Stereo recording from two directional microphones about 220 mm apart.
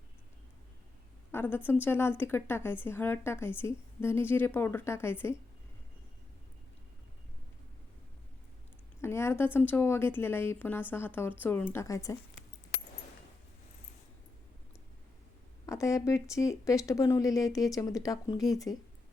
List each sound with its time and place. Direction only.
1.3 s a woman's voice: 10° left (ahead or behind)
9.0 s a woman's voice: 10° left (ahead or behind)
15.6 s a woman's voice: 15° left (ahead or behind)